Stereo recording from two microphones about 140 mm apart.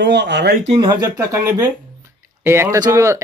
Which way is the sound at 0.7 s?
30° right (ahead or behind).